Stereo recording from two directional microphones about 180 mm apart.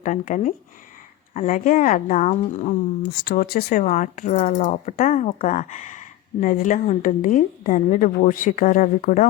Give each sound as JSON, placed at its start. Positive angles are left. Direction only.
{"t": 0.0, "sound": "speech", "side_deg": 45}
{"t": 3.1, "sound": "speech", "side_deg": 60}